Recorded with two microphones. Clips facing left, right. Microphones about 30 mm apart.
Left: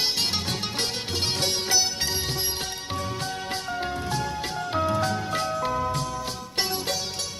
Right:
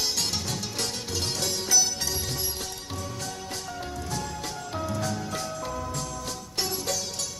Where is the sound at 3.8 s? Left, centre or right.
Left.